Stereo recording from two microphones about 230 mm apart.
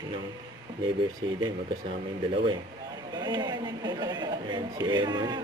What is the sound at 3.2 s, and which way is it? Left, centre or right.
Speech, centre.